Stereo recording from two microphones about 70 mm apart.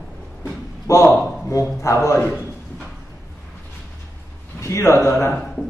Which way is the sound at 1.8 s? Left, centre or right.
Left.